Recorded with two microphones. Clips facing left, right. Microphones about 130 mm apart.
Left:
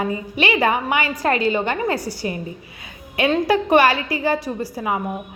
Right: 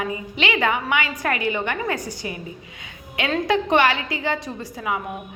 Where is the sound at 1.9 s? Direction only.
20° right (ahead or behind).